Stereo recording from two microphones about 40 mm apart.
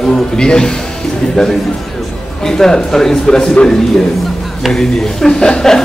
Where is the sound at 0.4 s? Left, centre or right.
Centre.